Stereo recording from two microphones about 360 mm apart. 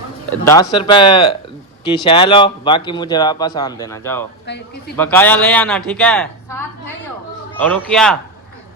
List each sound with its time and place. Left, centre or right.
0.4 s speech: centre
4.4 s a man's voice: left
4.9 s speech: centre